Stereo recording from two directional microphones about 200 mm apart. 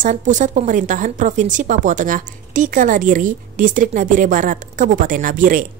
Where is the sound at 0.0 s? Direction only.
40° right (ahead or behind).